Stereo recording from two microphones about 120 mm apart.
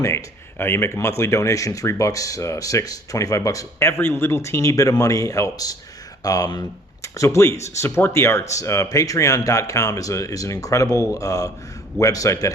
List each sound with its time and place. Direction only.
0.0 s speech: 25° left (ahead or behind)